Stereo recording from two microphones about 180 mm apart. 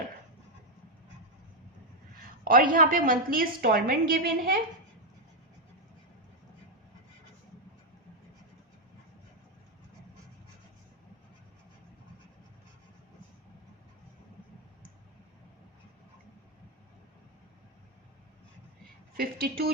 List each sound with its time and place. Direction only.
2.4 s a woman's voice: 50° right (ahead or behind)
19.1 s a woman's voice: 55° right (ahead or behind)